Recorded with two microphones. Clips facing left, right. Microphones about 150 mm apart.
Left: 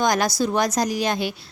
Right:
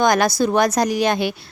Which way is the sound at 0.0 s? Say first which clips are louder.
Right 4 dB; 65° right (ahead or behind).